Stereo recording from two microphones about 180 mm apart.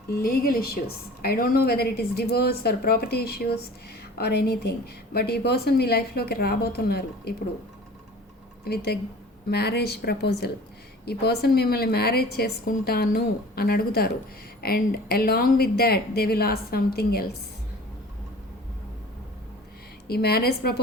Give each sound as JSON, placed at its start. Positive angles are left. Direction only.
{"t": 0.1, "sound": "a woman's voice", "side_deg": 55}
{"t": 8.6, "sound": "a woman's voice", "side_deg": 65}
{"t": 20.1, "sound": "a woman's voice", "side_deg": 60}